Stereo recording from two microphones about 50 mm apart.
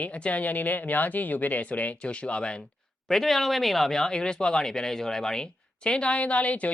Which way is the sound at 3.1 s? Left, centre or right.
Centre.